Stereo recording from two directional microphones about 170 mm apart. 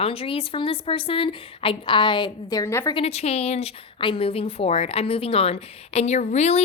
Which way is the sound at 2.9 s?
40° left (ahead or behind).